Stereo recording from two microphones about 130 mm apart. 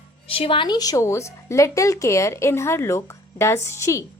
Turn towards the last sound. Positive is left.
turn(degrees=20)  # may be behind; listen again after turning